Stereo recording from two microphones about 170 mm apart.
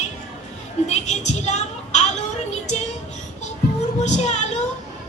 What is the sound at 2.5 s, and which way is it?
Music, 40° left (ahead or behind).